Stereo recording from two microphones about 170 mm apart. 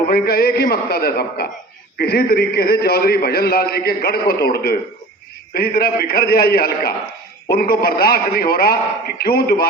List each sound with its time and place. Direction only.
0.1 s a man's voice: 65° left (ahead or behind)